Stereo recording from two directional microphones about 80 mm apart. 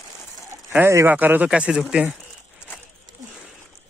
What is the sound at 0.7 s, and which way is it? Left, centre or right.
A man's voice, right.